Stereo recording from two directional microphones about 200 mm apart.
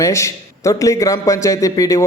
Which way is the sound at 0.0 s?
15° left (ahead or behind).